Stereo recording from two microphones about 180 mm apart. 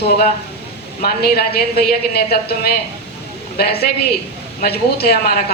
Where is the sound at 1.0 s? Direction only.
60° left (ahead or behind).